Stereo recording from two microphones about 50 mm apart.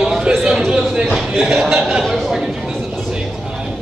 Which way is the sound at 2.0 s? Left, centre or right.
Centre.